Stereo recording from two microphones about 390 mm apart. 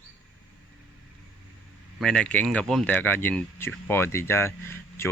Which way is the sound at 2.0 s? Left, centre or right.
Centre.